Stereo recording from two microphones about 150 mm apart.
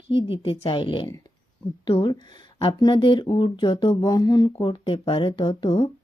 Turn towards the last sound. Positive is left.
turn(degrees=35)  # may be behind; listen again after turning